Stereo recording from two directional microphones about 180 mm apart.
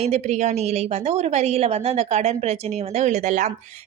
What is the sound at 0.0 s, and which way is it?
A woman's voice, 40° right (ahead or behind).